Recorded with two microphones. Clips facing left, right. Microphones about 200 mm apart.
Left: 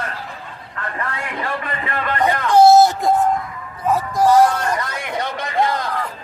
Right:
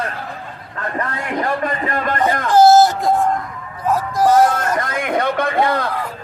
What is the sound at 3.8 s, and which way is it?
Music, centre (ahead or behind).